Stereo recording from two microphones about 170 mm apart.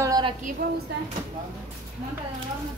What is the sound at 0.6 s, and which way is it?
Speech, 65° right (ahead or behind).